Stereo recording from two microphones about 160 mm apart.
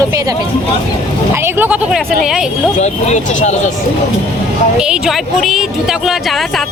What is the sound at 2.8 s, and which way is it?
Speech, 45° left (ahead or behind).